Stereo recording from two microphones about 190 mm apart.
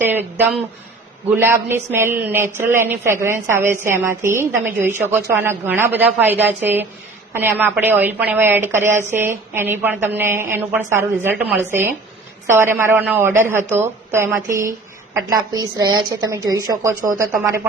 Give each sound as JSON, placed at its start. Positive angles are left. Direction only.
{"t": 0.1, "sound": "a woman's voice", "side_deg": -10}